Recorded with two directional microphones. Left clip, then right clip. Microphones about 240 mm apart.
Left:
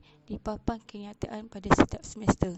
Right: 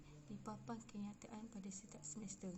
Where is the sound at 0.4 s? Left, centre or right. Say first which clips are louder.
Left 18 dB; left.